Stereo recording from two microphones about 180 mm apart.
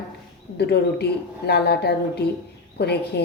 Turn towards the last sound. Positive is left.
turn(degrees=65)  # may be behind; listen again after turning